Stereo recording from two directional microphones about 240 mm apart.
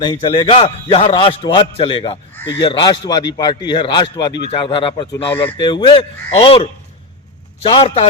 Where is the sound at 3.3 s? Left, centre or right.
Centre.